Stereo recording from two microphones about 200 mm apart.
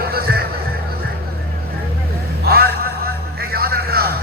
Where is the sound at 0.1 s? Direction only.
50° right (ahead or behind).